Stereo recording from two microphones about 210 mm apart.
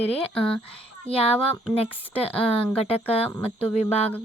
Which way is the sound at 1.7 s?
30° left (ahead or behind).